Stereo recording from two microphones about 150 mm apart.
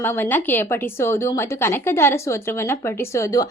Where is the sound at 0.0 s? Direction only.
15° left (ahead or behind).